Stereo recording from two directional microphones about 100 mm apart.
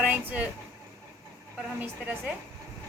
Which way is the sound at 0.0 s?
15° right (ahead or behind).